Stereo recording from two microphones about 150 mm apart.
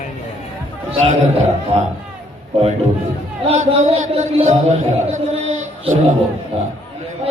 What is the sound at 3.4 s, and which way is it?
A man's voice, 45° right (ahead or behind).